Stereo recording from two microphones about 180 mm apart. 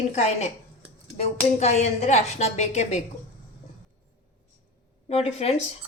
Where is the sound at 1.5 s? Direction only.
40° left (ahead or behind).